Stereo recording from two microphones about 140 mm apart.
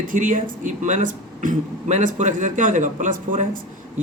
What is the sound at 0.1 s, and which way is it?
Speech, 70° right (ahead or behind).